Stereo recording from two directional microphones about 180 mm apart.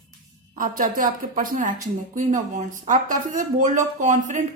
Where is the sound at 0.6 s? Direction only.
45° right (ahead or behind).